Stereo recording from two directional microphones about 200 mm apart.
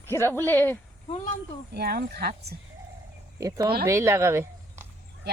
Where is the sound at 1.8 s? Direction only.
50° right (ahead or behind).